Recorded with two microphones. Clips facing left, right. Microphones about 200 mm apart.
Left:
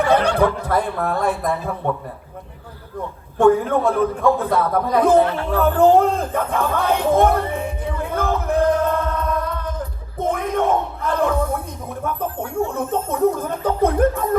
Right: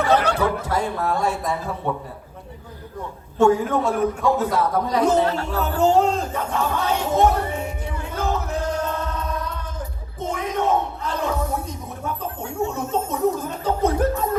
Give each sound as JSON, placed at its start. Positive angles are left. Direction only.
{"t": 0.1, "sound": "speech", "side_deg": 55}
{"t": 3.3, "sound": "speech", "side_deg": 55}
{"t": 5.5, "sound": "a sound", "side_deg": 55}
{"t": 12.0, "sound": "speech", "side_deg": 55}